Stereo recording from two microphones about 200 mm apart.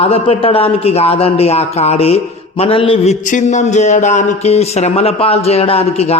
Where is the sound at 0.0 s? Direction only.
30° left (ahead or behind).